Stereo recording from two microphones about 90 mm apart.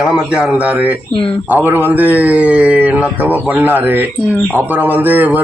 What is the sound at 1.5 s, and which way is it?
Speech, 20° right (ahead or behind).